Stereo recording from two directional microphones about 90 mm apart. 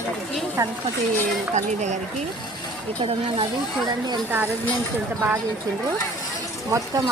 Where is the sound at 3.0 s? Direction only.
90° right.